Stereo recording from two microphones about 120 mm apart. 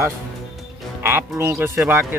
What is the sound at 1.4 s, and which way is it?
Speech, 20° right (ahead or behind).